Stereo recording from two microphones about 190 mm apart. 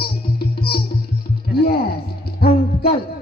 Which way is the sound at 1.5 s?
55° left (ahead or behind).